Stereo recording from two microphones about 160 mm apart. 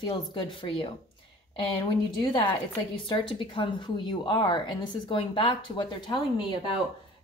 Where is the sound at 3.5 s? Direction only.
30° left (ahead or behind).